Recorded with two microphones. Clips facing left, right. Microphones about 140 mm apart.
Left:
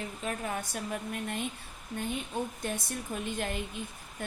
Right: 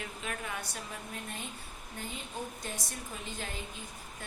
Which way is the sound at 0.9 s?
60° left (ahead or behind).